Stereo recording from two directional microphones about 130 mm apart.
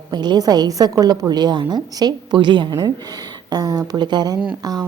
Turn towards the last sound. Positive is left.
turn(degrees=-30)  # may be behind; listen again after turning